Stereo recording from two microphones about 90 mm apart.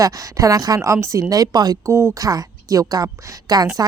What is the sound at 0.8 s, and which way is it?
A woman's voice, 30° right (ahead or behind).